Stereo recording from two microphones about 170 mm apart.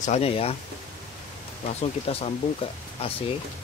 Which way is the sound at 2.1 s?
35° left (ahead or behind).